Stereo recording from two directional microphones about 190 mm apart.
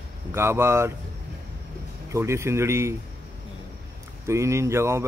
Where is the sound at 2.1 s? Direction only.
15° right (ahead or behind).